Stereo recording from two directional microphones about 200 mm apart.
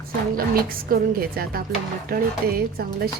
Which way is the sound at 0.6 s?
50° right (ahead or behind).